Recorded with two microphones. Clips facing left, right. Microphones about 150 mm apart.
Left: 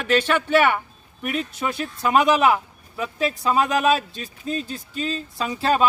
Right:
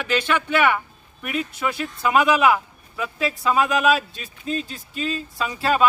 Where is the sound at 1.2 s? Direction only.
35° left (ahead or behind).